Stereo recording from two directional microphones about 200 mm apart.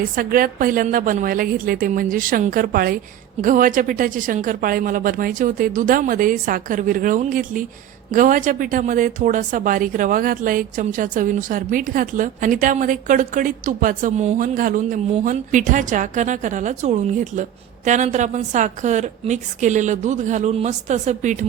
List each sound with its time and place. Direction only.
0.2 s speech: 45° right (ahead or behind)